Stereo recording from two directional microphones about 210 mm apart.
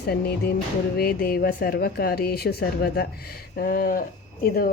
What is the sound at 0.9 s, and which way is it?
Speech, 45° left (ahead or behind).